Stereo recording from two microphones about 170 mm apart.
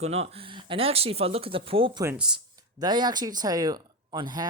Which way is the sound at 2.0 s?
10° right (ahead or behind).